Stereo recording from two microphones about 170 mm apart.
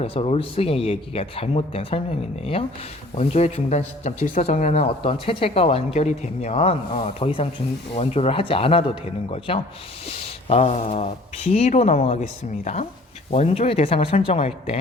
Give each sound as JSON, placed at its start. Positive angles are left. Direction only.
{"t": 0.0, "sound": "speech", "side_deg": 35}
{"t": 13.3, "sound": "speech", "side_deg": 40}